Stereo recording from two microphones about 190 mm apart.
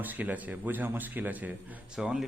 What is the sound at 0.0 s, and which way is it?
A man's voice, 10° right (ahead or behind).